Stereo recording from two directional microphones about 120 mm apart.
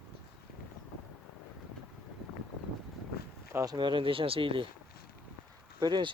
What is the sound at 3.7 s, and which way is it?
Speech, 40° right (ahead or behind).